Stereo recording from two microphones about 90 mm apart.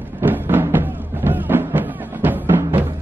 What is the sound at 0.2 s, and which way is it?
Music, 20° right (ahead or behind).